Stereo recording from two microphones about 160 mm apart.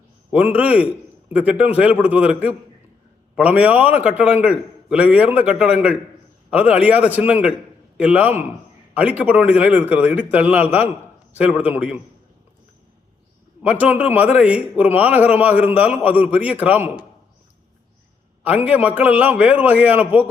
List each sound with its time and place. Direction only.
0.3 s a man's voice: 10° right (ahead or behind)
13.6 s a man's voice: 10° right (ahead or behind)
18.6 s a man's voice: 10° right (ahead or behind)